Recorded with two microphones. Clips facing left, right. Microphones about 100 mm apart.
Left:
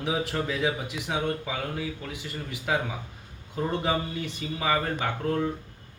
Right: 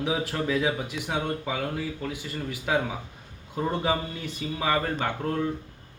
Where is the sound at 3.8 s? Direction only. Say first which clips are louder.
Even; centre (ahead or behind).